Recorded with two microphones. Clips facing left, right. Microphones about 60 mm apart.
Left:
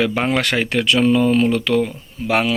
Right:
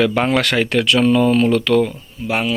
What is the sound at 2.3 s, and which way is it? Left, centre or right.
Speech, left.